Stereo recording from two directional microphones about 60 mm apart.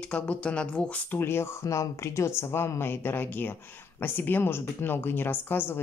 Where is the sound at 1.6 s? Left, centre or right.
Left.